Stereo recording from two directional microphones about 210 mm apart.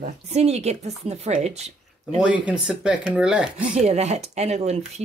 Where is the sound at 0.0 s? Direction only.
30° right (ahead or behind).